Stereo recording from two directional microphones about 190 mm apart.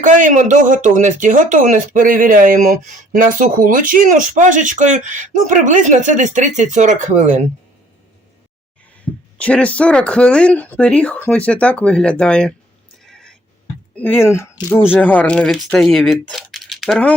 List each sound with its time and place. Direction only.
0.0 s speech: 40° right (ahead or behind)
9.4 s speech: 5° left (ahead or behind)
13.1 s a sound: 5° left (ahead or behind)
13.9 s speech: 10° left (ahead or behind)